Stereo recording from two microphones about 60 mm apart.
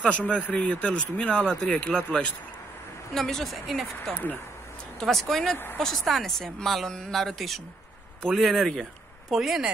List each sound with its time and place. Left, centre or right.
0.0 s speech: left
3.2 s a woman's voice: centre
4.1 s speech: left
5.0 s a woman's voice: centre
9.3 s speech: centre